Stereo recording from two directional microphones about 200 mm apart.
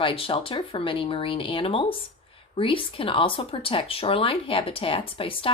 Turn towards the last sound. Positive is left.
turn(degrees=25)  # may be behind; listen again after turning